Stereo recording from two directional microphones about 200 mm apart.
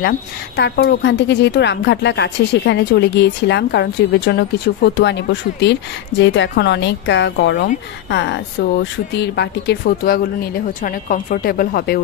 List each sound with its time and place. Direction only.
0.6 s a woman's voice: 60° left (ahead or behind)